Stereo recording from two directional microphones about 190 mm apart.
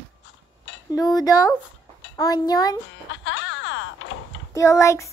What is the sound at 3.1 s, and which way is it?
Door, 75° left (ahead or behind).